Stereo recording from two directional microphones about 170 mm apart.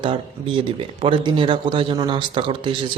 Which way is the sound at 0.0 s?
30° right (ahead or behind).